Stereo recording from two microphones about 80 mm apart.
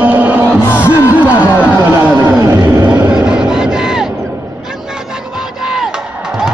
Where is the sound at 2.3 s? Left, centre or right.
Right.